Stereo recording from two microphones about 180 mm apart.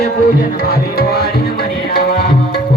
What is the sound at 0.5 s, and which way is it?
Music, 60° left (ahead or behind).